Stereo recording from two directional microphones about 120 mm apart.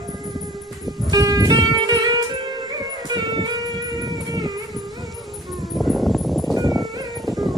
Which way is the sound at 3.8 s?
35° right (ahead or behind).